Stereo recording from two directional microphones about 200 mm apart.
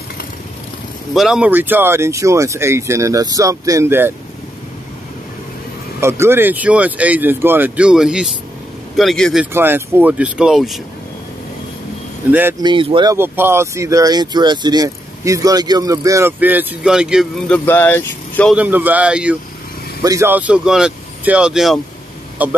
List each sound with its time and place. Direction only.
1.1 s speech: centre (ahead or behind)
5.9 s speech: 10° right (ahead or behind)
9.5 s speech: 10° right (ahead or behind)
12.3 s speech: 10° right (ahead or behind)
12.6 s speech: 25° right (ahead or behind); by 17.6 s 5° right (ahead or behind)
17.6 s speech: 10° left (ahead or behind)
18.5 s speech: 10° right (ahead or behind)
20.0 s speech: 15° right (ahead or behind)